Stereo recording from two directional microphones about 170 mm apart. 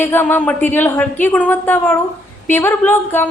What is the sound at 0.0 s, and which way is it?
A woman's voice, 15° left (ahead or behind).